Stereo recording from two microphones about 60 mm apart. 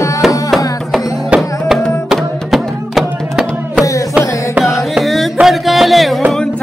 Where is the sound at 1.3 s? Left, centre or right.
Right.